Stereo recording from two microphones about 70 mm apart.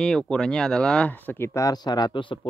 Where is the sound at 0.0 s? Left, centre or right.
Centre.